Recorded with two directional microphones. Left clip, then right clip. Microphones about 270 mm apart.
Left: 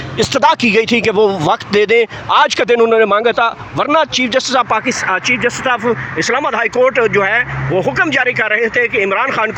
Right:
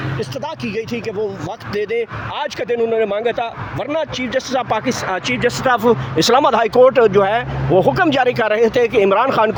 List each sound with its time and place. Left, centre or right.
0.2 s speech: left
5.5 s speech: centre